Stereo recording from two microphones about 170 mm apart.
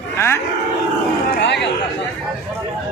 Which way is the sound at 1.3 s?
85° left.